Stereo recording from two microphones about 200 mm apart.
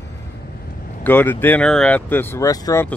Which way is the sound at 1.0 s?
10° left (ahead or behind).